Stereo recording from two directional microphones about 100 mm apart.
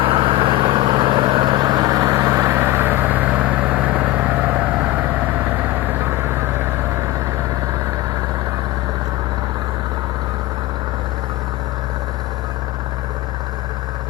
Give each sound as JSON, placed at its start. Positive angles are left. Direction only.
{"t": 0.0, "sound": "vehicle", "side_deg": -60}
{"t": 2.0, "sound": "vehicle", "side_deg": -25}